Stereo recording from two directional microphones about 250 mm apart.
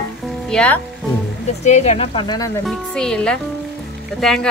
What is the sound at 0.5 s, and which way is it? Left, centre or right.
Speech, centre.